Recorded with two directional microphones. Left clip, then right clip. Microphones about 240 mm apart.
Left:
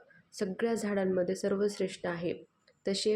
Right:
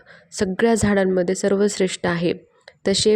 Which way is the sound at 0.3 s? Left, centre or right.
Right.